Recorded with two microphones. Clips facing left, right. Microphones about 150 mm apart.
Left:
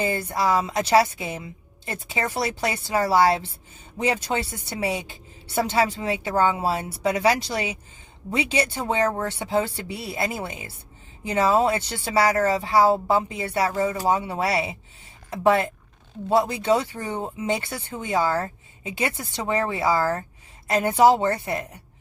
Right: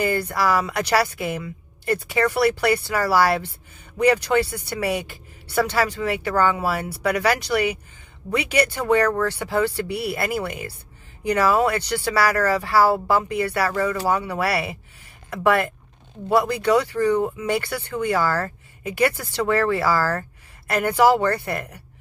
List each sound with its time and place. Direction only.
0.0 s a woman's voice: 25° left (ahead or behind)